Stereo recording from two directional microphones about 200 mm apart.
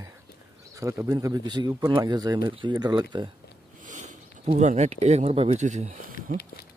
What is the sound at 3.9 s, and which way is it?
Speech, 40° right (ahead or behind).